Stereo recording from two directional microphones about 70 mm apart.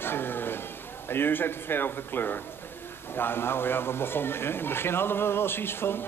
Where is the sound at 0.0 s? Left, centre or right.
Left.